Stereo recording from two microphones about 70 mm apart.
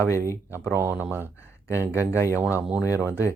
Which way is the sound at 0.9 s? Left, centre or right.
Right.